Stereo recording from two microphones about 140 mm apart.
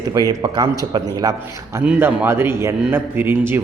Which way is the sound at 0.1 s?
25° right (ahead or behind).